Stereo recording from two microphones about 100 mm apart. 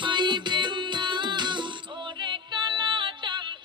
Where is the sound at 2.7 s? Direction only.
50° right (ahead or behind).